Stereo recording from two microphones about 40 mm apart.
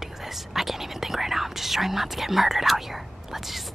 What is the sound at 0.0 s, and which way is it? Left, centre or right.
Speech, centre.